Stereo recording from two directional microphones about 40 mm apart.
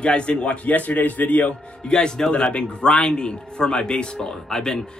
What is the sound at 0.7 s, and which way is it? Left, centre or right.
Speech, left.